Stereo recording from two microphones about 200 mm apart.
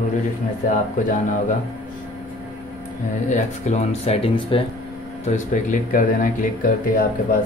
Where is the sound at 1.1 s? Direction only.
40° left (ahead or behind).